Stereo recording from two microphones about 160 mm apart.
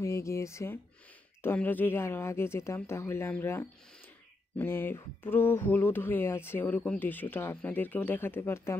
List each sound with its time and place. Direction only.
0.0 s speech: 20° left (ahead or behind)